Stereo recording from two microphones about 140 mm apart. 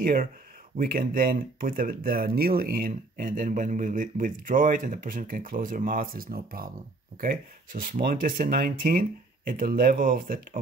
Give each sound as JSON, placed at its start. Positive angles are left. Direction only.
{"t": 0.0, "sound": "speech", "side_deg": -90}